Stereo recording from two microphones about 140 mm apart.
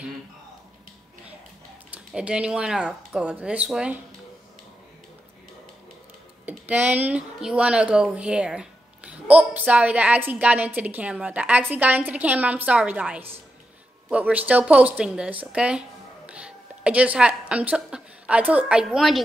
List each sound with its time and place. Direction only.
1.9 s speech: 5° right (ahead or behind)
6.4 s a woman's voice: 10° right (ahead or behind)